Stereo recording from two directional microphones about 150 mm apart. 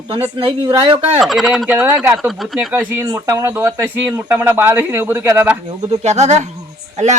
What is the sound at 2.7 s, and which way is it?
A man's voice, 15° right (ahead or behind).